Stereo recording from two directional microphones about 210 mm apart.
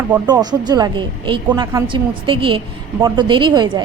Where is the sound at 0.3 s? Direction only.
20° right (ahead or behind).